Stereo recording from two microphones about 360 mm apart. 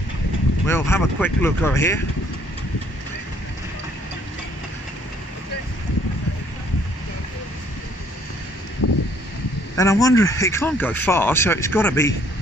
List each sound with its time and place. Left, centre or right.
0.7 s speech: centre
8.8 s a sound: left
9.8 s speech: centre